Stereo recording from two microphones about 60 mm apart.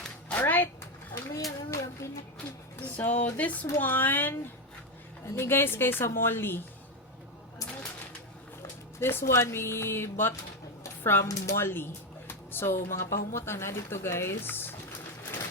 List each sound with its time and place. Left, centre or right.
0.3 s a sound: left
1.5 s a child's voice: left
2.8 s a woman's voice: left
9.0 s speech: left
11.3 s a child's voice: left
11.5 s a woman's voice: left